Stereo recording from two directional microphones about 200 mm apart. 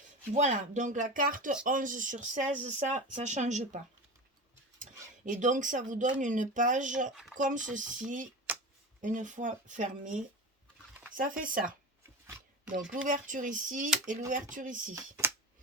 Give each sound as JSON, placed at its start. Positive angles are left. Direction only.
{"t": 0.3, "sound": "speech", "side_deg": -35}
{"t": 5.2, "sound": "speech", "side_deg": -40}
{"t": 11.1, "sound": "speech", "side_deg": -45}
{"t": 13.1, "sound": "speech", "side_deg": -40}
{"t": 14.9, "sound": "speech", "side_deg": -10}